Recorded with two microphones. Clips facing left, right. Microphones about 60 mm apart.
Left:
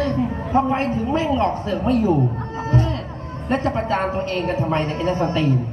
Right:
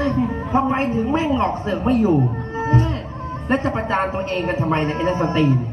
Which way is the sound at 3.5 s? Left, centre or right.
Right.